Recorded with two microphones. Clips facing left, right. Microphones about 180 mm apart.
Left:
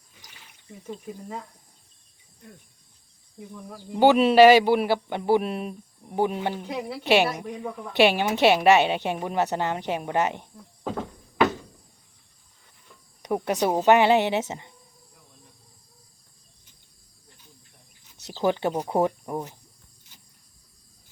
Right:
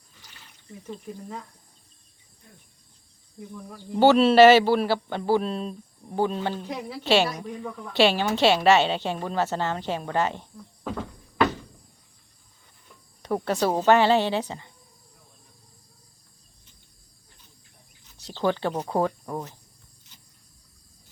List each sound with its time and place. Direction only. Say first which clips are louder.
0.9 s speech: left 1 dB; 5° left (ahead or behind)
3.3 s speech: even; 10° left (ahead or behind)
13.2 s speech: even; 20° left (ahead or behind)
18.4 s speech: left 1 dB; 20° left (ahead or behind)